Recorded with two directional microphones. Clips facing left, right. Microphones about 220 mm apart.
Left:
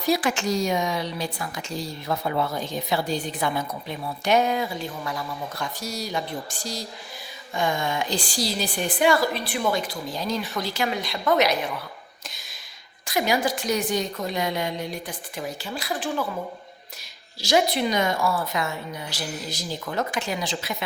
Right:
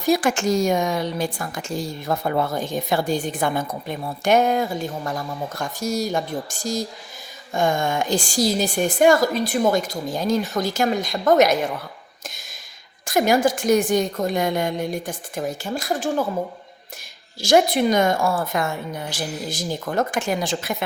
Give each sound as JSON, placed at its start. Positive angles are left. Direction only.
{"t": 0.0, "sound": "a woman's voice", "side_deg": -45}
{"t": 13.1, "sound": "a woman's voice", "side_deg": -50}
{"t": 17.4, "sound": "a woman's voice", "side_deg": -50}